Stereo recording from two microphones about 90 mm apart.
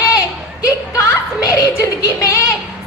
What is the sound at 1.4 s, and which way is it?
A woman's voice, 40° left (ahead or behind).